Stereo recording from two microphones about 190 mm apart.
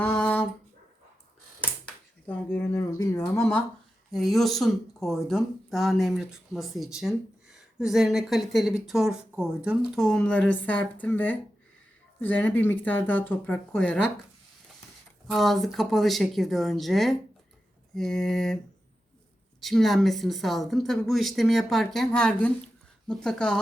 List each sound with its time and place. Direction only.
0.0 s a sound: 10° left (ahead or behind)
2.2 s speech: 10° left (ahead or behind)
4.1 s speech: centre (ahead or behind)
15.3 s speech: centre (ahead or behind)